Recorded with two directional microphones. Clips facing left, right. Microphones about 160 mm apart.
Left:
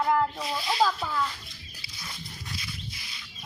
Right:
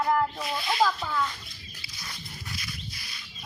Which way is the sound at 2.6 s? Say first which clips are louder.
Even; 20° left (ahead or behind).